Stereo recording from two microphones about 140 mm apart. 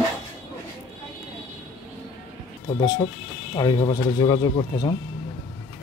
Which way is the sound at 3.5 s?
30° left (ahead or behind).